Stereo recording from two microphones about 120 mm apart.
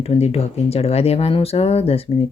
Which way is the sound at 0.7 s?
60° left (ahead or behind).